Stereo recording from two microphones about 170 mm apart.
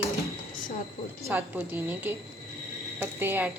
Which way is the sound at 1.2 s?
10° right (ahead or behind).